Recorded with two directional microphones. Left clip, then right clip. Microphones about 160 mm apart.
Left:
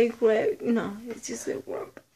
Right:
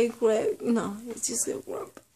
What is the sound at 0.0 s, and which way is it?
Speech, 5° right (ahead or behind).